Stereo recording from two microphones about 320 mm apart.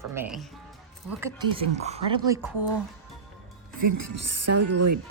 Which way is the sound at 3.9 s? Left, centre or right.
Right.